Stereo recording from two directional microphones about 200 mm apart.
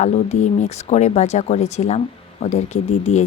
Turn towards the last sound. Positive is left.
turn(degrees=35)  # may be behind; listen again after turning